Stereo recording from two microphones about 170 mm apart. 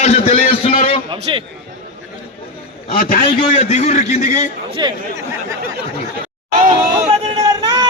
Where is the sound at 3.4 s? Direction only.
40° left (ahead or behind).